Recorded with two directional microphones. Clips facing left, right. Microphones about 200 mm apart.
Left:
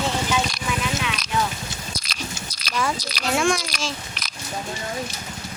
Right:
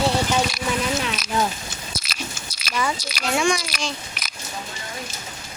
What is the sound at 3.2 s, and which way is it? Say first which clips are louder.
A child's voice: even; centre (ahead or behind).